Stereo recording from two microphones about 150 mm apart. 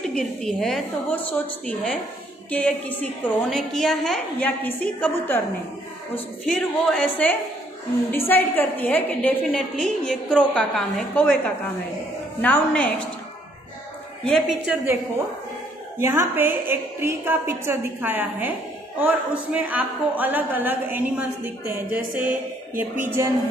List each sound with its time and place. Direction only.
0.0 s a woman's voice: 5° left (ahead or behind)
6.4 s a woman's voice: 5° left (ahead or behind)
14.3 s a woman's voice: centre (ahead or behind)
16.0 s a woman's voice: 15° right (ahead or behind)